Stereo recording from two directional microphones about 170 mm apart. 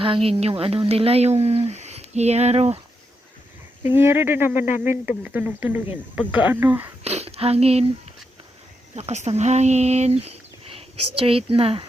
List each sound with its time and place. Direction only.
0.0 s speech: 30° right (ahead or behind)
3.8 s speech: 15° right (ahead or behind)
7.0 s speech: 40° right (ahead or behind)
9.0 s speech: 40° right (ahead or behind)